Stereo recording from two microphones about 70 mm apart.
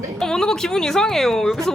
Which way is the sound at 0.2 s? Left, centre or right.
Centre.